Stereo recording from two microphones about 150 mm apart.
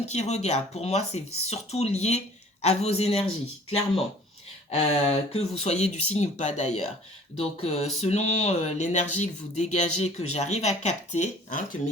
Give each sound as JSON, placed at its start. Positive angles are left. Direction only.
{"t": 0.0, "sound": "speech", "side_deg": 45}
{"t": 4.7, "sound": "speech", "side_deg": 45}